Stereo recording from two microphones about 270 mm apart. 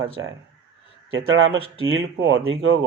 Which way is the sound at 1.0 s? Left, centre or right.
Right.